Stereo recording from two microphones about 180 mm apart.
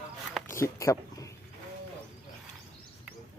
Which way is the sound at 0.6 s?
15° left (ahead or behind).